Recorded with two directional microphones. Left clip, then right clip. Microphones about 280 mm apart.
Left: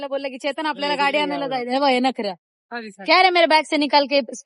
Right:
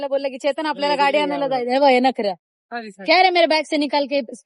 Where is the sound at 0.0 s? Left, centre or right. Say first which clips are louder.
Right 4 dB; centre.